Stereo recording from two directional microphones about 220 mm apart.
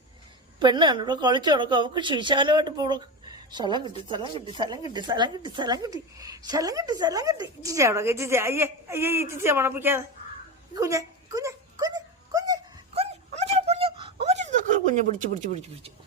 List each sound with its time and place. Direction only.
0.6 s a woman's voice: 20° right (ahead or behind)
10.8 s a sound: 15° right (ahead or behind); by 15.0 s 35° right (ahead or behind)
15.4 s a woman's voice: 30° right (ahead or behind)